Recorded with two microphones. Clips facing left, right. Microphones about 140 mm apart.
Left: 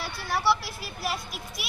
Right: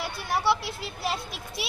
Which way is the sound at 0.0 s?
15° right (ahead or behind).